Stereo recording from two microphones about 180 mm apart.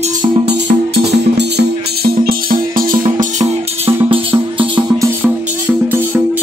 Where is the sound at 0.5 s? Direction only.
70° right (ahead or behind).